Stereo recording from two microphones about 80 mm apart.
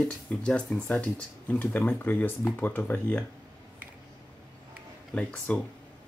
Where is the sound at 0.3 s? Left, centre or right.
Centre.